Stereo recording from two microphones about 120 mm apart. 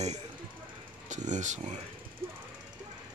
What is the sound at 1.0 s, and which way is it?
Speech, 90° right.